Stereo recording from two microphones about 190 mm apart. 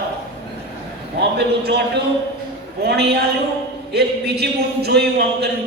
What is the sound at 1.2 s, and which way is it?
Speech, 60° right (ahead or behind).